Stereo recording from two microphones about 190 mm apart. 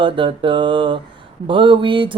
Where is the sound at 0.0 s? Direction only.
25° right (ahead or behind).